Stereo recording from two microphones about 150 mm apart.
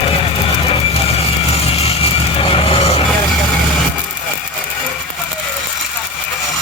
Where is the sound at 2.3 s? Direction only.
40° left (ahead or behind).